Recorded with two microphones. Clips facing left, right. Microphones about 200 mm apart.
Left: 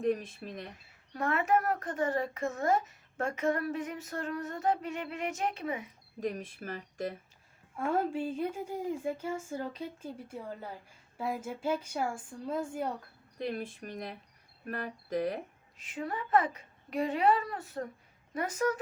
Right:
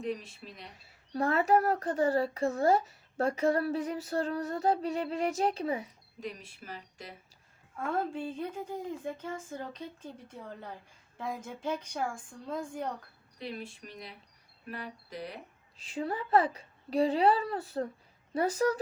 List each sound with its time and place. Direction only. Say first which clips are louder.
0.0 s speech: left 5 dB; 50° left (ahead or behind)
1.1 s speech: right 3 dB; 35° right (ahead or behind)
6.1 s speech: left 6 dB; 50° left (ahead or behind)
7.8 s speech: left 2 dB; 10° left (ahead or behind)
13.4 s speech: left 5 dB; 50° left (ahead or behind)
15.8 s speech: right 3 dB; 30° right (ahead or behind)